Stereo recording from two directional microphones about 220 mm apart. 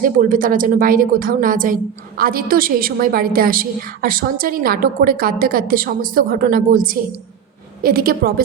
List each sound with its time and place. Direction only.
0.0 s a woman's voice: 35° right (ahead or behind)